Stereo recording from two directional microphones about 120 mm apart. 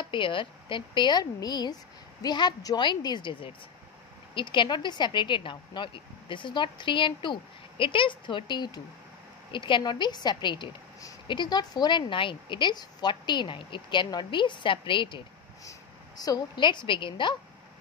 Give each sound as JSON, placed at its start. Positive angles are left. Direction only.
{"t": 0.0, "sound": "speech", "side_deg": 45}
{"t": 16.2, "sound": "speech", "side_deg": 35}